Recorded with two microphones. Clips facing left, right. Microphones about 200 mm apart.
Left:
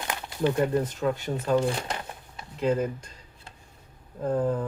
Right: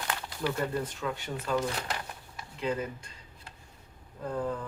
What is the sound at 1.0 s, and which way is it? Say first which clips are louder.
Speech: left 7 dB; 45° left (ahead or behind).